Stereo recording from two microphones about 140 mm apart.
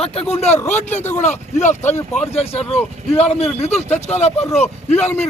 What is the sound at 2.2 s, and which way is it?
Speech, 45° left (ahead or behind).